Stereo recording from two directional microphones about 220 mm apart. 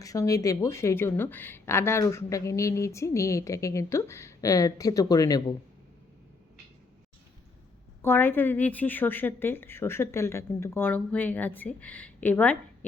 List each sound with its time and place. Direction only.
0.0 s speech: 15° left (ahead or behind)
8.0 s speech: 10° left (ahead or behind)